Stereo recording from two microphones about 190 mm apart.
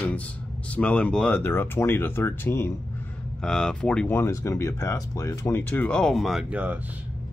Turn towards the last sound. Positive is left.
turn(degrees=-5)  # may be behind; listen again after turning